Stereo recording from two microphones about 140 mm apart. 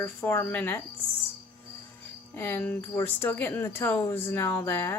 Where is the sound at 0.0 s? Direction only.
15° left (ahead or behind).